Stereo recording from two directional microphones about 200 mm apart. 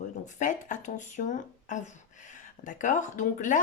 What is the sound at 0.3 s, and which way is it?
Speech, 40° left (ahead or behind).